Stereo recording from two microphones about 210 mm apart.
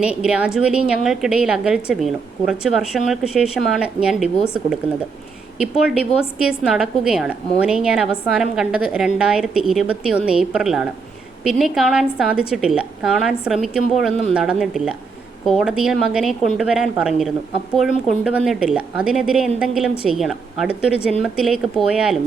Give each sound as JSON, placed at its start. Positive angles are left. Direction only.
{"t": 0.0, "sound": "a woman's voice", "side_deg": -5}
{"t": 5.5, "sound": "a woman's voice", "side_deg": -5}